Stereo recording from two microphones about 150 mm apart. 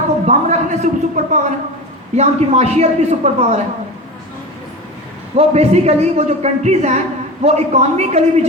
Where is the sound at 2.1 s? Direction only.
45° right (ahead or behind).